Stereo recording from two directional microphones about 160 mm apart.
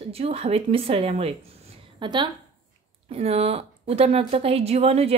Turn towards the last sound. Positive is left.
turn(degrees=-40)  # may be behind; listen again after turning